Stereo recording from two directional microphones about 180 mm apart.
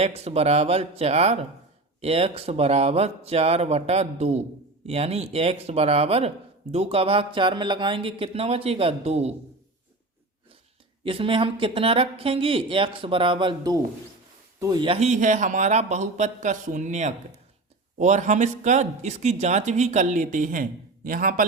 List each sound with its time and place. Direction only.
0.0 s speech: 35° right (ahead or behind)
11.0 s speech: 30° right (ahead or behind); by 21.4 s 50° right (ahead or behind)